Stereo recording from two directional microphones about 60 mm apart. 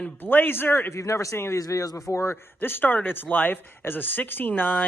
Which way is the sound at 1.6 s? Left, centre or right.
Left.